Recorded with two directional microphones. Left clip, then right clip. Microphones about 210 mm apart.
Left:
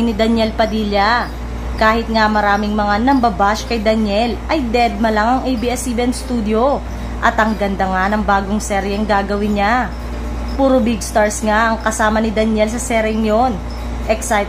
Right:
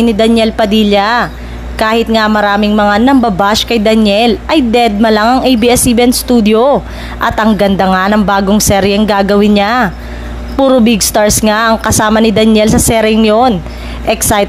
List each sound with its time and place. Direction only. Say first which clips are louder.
0.0 s a woman's voice: right 7 dB; 35° right (ahead or behind)